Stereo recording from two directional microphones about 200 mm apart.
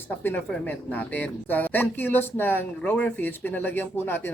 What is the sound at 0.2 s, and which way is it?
Speech, 10° left (ahead or behind).